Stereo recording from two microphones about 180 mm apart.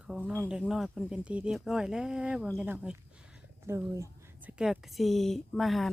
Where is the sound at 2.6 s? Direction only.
10° right (ahead or behind).